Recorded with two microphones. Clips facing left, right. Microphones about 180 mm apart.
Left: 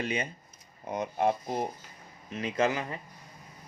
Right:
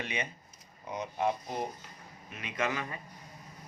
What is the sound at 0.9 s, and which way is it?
Speech, 50° left (ahead or behind).